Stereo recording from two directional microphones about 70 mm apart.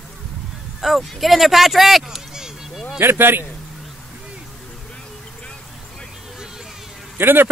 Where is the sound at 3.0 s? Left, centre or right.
Right.